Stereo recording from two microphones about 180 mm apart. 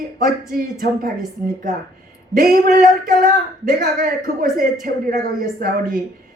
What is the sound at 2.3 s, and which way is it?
Speech, 50° right (ahead or behind).